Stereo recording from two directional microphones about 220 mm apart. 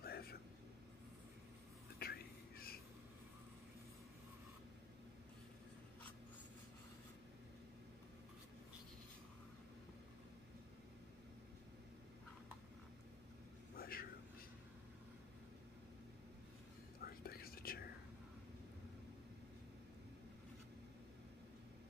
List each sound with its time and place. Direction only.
0.0 s vehicle: 45° left (ahead or behind)
2.0 s whispering: 45° left (ahead or behind)
13.7 s a sound: 40° left (ahead or behind)
17.0 s whispering: 45° left (ahead or behind)